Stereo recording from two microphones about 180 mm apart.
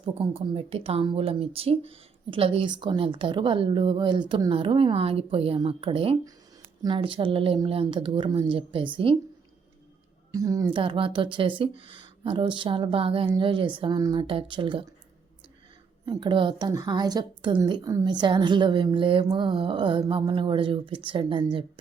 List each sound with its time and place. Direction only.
0.0 s a woman's voice: 30° right (ahead or behind)
10.3 s a woman's voice: 20° right (ahead or behind)
16.0 s a woman's voice: 25° right (ahead or behind)